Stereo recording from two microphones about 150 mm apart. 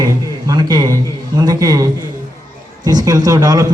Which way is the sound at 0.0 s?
25° right (ahead or behind).